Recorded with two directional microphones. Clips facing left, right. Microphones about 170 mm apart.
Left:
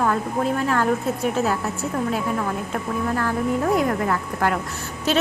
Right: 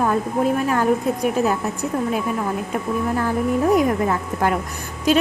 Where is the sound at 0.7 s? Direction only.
15° right (ahead or behind).